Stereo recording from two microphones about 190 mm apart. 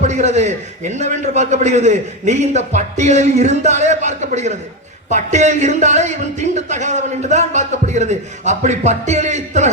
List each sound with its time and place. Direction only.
0.0 s a man's voice: 40° right (ahead or behind)